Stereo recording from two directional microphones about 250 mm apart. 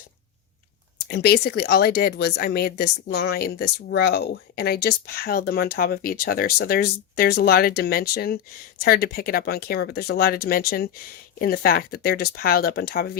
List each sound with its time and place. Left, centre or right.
0.9 s speech: left